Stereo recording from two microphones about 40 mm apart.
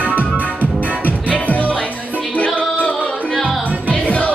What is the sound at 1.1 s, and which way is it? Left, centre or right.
Music, left.